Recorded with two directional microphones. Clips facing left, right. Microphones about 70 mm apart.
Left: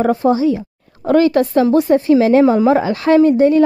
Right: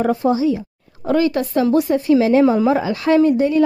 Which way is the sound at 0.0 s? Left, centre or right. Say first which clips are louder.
Left 3 dB; left.